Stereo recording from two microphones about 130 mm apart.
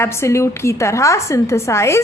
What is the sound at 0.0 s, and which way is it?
A woman's voice, 20° left (ahead or behind).